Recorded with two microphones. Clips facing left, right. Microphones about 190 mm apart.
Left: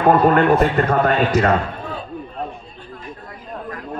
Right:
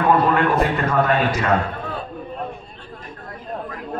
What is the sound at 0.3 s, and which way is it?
A man's voice, 50° left (ahead or behind).